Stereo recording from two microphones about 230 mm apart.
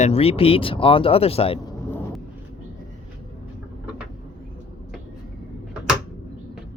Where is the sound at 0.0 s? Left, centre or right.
Left.